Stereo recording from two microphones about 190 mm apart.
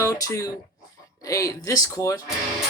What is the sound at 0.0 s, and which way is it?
Speech, 15° left (ahead or behind).